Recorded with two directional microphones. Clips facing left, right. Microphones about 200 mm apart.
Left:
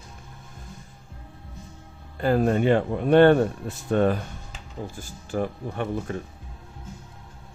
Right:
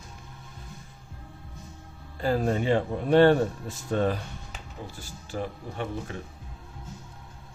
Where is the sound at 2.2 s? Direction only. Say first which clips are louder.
Left 4 dB; 55° left (ahead or behind).